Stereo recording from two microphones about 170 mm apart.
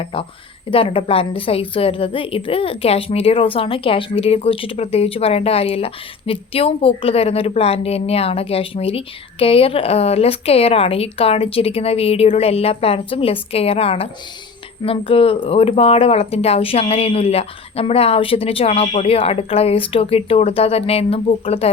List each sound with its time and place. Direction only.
0.0 s a woman's voice: 30° left (ahead or behind)